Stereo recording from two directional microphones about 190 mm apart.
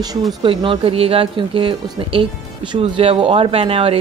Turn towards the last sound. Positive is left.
turn(degrees=-30)  # may be behind; listen again after turning